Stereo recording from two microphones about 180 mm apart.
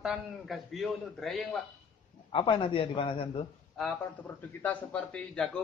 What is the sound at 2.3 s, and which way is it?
Speech, 30° left (ahead or behind).